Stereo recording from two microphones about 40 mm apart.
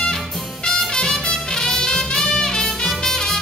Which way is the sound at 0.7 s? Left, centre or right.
Centre.